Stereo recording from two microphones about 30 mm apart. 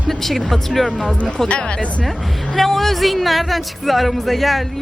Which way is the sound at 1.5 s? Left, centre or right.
Left.